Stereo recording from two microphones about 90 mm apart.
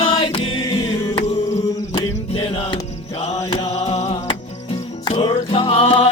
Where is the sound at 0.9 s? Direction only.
65° left (ahead or behind).